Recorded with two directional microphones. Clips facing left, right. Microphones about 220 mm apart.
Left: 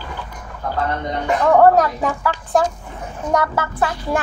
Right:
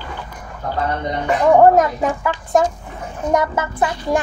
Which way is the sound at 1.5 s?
20° right (ahead or behind).